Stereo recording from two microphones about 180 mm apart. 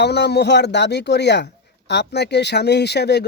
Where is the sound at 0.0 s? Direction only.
70° left (ahead or behind).